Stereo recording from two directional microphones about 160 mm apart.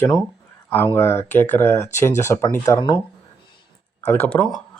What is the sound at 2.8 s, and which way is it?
Speech, 30° left (ahead or behind).